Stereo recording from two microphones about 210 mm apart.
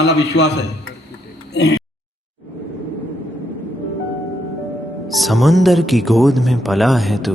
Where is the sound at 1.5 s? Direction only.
55° left (ahead or behind).